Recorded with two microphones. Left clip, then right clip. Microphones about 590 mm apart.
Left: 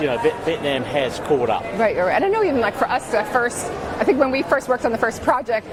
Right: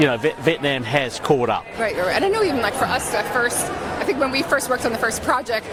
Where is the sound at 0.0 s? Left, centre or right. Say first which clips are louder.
Right 1 dB; right.